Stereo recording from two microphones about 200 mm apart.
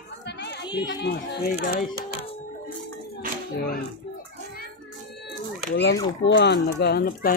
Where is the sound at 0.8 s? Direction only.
60° left (ahead or behind).